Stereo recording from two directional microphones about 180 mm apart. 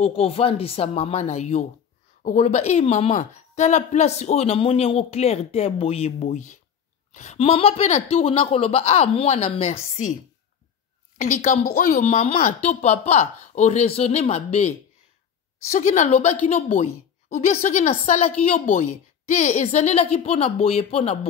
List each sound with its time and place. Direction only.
0.0 s speech: 35° left (ahead or behind)
11.1 s a woman's voice: 45° left (ahead or behind)
15.7 s speech: 45° left (ahead or behind)